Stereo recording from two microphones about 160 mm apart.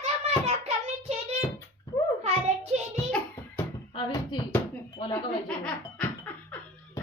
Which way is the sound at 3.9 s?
30° left (ahead or behind).